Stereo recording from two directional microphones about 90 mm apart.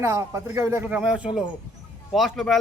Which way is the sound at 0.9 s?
10° right (ahead or behind).